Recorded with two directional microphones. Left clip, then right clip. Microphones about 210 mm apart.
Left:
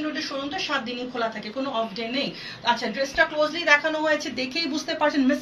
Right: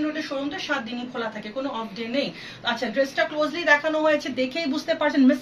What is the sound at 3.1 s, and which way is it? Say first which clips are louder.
Speech: left 2 dB; 20° right (ahead or behind).